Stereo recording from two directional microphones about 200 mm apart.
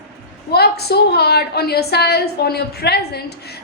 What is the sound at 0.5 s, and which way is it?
A woman's voice, 55° left (ahead or behind).